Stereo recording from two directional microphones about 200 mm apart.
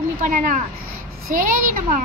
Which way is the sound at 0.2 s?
40° right (ahead or behind).